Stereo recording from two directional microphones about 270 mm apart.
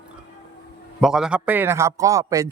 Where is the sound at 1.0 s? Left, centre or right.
Centre.